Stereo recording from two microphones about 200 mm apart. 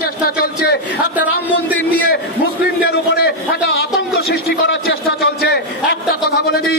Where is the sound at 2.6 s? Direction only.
55° left (ahead or behind).